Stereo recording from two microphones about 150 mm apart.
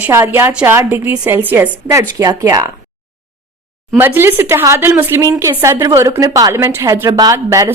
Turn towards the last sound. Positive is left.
turn(degrees=-25)  # may be behind; listen again after turning